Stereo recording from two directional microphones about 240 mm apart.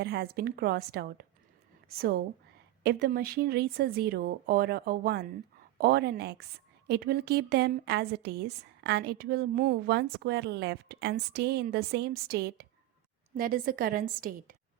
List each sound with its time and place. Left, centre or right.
0.0 s speech: right
2.8 s a woman's voice: right